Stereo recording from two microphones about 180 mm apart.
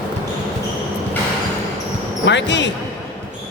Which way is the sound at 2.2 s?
80° left.